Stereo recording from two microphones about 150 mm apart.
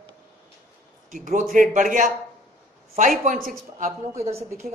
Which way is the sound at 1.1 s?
60° right (ahead or behind).